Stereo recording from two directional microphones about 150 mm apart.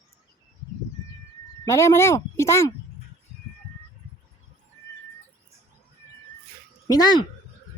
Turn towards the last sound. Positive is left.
turn(degrees=25)  # may be behind; listen again after turning